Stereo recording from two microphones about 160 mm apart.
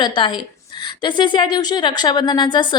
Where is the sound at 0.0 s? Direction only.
30° left (ahead or behind).